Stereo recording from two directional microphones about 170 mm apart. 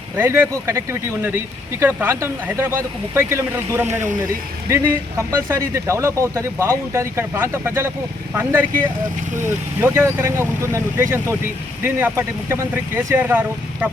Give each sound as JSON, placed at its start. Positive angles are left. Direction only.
{"t": 0.2, "sound": "speech", "side_deg": -15}
{"t": 1.8, "sound": "speech", "side_deg": -10}
{"t": 9.8, "sound": "speech", "side_deg": -15}